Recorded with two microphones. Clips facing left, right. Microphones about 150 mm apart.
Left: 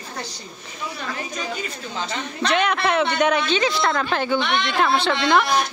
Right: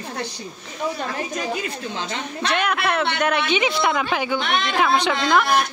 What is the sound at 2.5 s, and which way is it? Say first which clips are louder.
Speech: left 2 dB; centre (ahead or behind).